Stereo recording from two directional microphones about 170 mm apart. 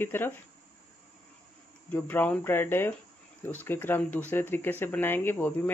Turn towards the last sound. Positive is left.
turn(degrees=10)  # may be behind; listen again after turning